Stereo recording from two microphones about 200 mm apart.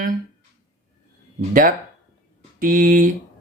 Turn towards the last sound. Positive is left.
turn(degrees=-45)  # may be behind; listen again after turning